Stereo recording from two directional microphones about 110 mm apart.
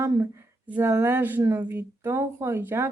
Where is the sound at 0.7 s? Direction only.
15° right (ahead or behind).